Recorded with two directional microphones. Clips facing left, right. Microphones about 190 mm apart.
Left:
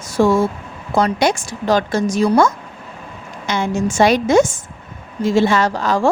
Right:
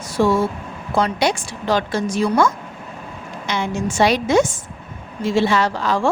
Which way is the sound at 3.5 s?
45° left (ahead or behind).